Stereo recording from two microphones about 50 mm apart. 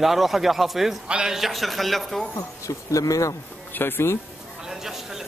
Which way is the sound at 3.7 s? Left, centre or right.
Left.